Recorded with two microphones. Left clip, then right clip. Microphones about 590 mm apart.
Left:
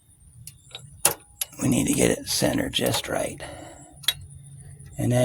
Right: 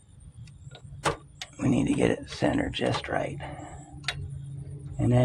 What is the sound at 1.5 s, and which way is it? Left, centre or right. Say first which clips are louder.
Speech: left 2 dB; left.